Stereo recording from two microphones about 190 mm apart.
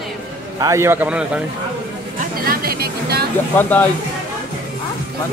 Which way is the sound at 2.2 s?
50° right (ahead or behind).